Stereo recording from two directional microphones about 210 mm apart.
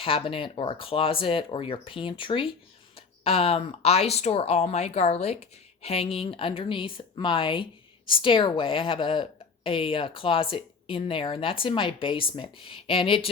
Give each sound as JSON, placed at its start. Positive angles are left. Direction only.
{"t": 0.0, "sound": "speech", "side_deg": 25}